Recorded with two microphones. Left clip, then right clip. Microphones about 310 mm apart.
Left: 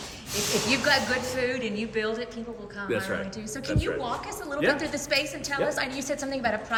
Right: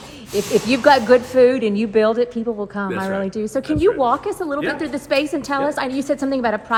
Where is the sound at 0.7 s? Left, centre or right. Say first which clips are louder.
Right 12 dB; centre.